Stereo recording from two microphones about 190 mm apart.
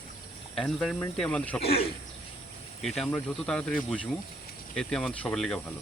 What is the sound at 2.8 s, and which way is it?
Speech, centre (ahead or behind).